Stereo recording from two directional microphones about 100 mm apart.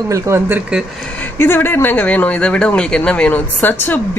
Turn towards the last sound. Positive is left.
turn(degrees=20)  # may be behind; listen again after turning